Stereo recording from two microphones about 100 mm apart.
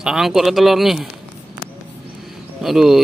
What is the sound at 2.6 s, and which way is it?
Speech, 5° right (ahead or behind).